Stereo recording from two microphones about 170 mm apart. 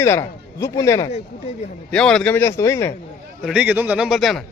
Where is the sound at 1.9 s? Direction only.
5° left (ahead or behind).